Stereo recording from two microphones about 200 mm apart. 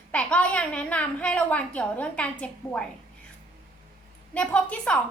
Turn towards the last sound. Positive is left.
turn(degrees=5)  # may be behind; listen again after turning